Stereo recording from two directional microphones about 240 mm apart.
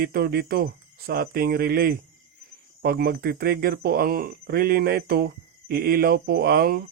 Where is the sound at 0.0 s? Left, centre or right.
Right.